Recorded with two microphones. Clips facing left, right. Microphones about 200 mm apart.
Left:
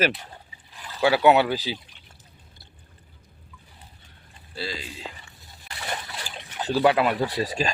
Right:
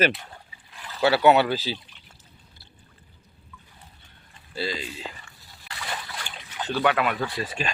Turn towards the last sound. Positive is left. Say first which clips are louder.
# left 4 dB
turn(degrees=35)  # may be behind; listen again after turning